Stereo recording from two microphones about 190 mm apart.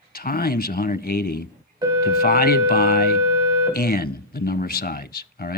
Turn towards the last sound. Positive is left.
turn(degrees=55)  # may be behind; listen again after turning